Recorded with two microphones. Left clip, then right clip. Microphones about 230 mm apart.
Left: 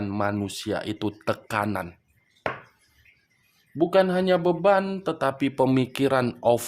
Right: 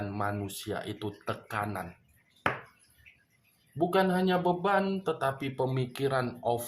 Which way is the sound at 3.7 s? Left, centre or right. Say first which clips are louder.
Left 6 dB; left.